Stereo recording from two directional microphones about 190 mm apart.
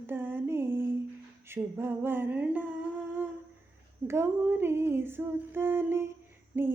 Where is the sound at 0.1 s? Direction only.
10° right (ahead or behind).